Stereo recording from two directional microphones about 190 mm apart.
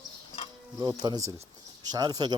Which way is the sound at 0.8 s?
20° right (ahead or behind).